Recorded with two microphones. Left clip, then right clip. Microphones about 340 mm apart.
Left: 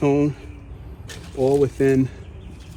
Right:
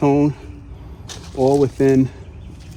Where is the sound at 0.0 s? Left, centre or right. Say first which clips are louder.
Right 3 dB; centre.